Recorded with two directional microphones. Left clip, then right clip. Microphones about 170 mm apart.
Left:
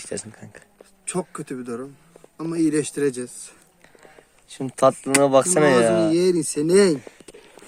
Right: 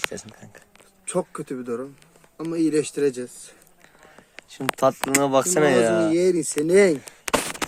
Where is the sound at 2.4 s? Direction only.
50° left (ahead or behind).